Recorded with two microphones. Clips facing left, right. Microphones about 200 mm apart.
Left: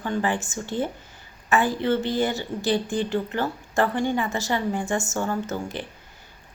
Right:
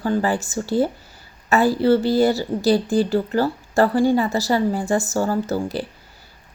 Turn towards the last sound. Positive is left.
turn(degrees=-35)  # may be behind; listen again after turning